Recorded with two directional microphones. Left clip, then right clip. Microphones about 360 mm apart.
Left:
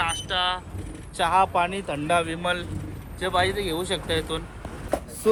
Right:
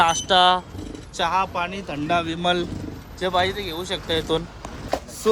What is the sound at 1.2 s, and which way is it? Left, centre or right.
Speech, centre.